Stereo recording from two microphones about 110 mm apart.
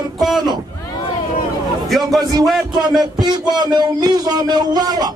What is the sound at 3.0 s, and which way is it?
Speech, 40° right (ahead or behind).